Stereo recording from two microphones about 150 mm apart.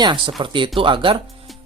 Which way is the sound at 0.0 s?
30° right (ahead or behind).